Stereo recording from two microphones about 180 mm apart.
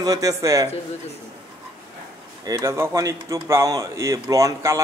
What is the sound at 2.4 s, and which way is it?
Speech, 15° right (ahead or behind).